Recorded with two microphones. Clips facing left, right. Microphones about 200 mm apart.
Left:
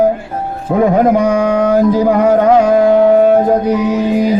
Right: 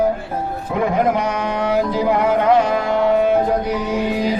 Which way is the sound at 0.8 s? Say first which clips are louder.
Left 7 dB; 45° left (ahead or behind).